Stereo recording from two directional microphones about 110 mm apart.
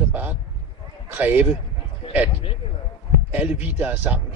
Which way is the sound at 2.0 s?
55° left (ahead or behind).